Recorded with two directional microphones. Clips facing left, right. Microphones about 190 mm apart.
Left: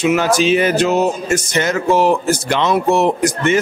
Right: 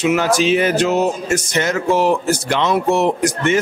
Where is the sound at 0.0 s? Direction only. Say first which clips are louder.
Left 1 dB; 5° left (ahead or behind).